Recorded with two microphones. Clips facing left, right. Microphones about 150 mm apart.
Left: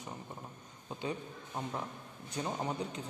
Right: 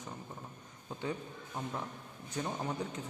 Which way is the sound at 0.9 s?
15° left (ahead or behind).